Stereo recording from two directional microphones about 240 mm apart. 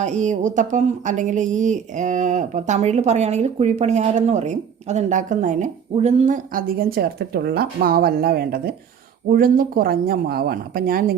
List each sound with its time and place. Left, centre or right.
0.0 s speech: right